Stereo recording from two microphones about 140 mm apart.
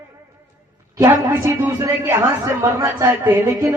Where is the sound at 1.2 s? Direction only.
15° right (ahead or behind).